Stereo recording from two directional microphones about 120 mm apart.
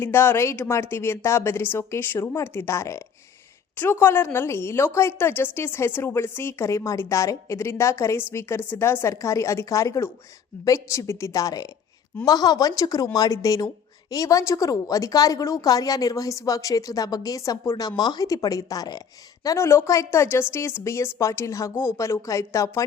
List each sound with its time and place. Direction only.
0.0 s a woman's voice: 20° left (ahead or behind)
19.5 s a woman's voice: 20° left (ahead or behind)